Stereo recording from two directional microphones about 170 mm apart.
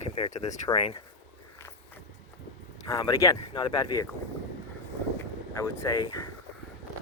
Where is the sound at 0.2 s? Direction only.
40° left (ahead or behind).